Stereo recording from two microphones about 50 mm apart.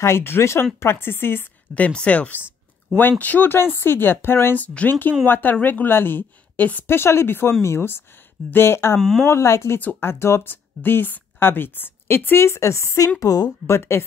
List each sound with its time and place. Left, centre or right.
0.0 s speech: left
1.8 s a woman's voice: left
4.6 s a woman's voice: left
6.9 s speech: left
8.9 s speech: centre
9.2 s a woman's voice: left
9.9 s speech: left
12.4 s a woman's voice: left
13.7 s speech: left